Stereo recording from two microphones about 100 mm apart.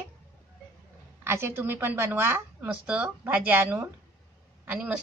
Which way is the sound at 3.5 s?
25° right (ahead or behind).